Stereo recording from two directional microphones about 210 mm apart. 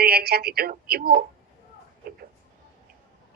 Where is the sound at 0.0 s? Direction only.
50° right (ahead or behind).